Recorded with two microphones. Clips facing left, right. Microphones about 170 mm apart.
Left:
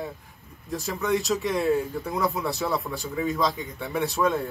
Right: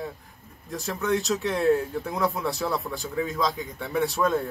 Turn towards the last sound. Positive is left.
turn(degrees=0)  # may be behind; listen again after turning